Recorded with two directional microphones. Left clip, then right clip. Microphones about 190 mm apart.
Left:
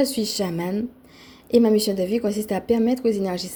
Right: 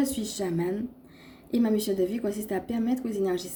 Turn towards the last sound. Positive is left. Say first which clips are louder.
# left 6 dB
turn(degrees=35)  # may be behind; listen again after turning